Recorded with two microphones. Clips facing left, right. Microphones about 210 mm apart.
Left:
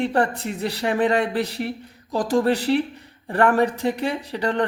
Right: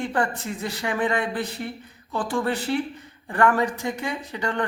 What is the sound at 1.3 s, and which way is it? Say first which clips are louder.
Speech: left 4 dB; 75° left (ahead or behind).